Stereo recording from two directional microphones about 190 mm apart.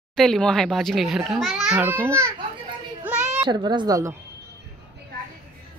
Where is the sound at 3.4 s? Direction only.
25° right (ahead or behind).